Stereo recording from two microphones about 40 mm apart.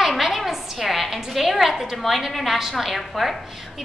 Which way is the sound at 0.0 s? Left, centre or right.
Centre.